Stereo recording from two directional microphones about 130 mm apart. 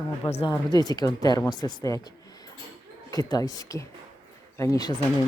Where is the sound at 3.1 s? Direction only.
30° left (ahead or behind).